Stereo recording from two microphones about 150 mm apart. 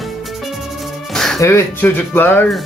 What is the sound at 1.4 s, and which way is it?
Speech, 15° left (ahead or behind).